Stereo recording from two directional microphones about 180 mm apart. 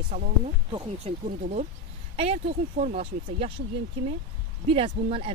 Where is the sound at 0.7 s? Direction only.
35° right (ahead or behind).